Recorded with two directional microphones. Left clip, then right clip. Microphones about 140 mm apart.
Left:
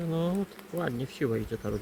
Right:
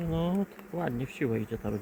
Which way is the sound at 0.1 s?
10° right (ahead or behind).